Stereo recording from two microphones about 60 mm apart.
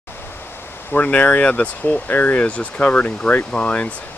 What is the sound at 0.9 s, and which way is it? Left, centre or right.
Speech, left.